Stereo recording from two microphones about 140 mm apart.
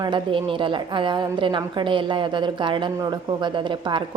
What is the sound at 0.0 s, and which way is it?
A woman's voice, 35° right (ahead or behind).